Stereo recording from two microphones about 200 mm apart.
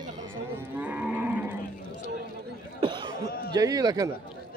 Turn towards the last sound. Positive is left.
turn(degrees=-20)  # may be behind; listen again after turning